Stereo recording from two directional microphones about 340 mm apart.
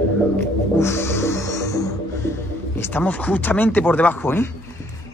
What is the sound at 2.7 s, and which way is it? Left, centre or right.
Speech, centre.